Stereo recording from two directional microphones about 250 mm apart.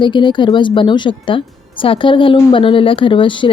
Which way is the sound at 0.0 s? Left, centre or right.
Centre.